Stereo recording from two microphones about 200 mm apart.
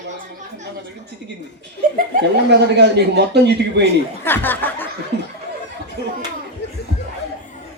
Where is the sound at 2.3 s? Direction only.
60° right (ahead or behind).